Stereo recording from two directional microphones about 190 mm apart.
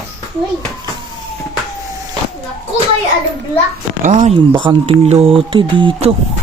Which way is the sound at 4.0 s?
40° right (ahead or behind).